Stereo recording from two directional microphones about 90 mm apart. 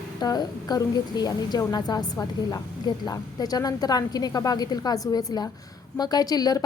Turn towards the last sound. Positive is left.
turn(degrees=45)  # may be behind; listen again after turning